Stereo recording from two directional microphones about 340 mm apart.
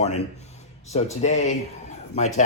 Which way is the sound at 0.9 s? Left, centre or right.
Centre.